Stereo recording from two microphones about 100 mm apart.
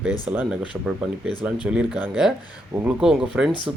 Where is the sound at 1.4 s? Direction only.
10° right (ahead or behind).